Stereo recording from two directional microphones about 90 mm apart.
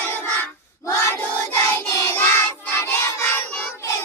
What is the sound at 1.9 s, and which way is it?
Child singing, 30° left (ahead or behind).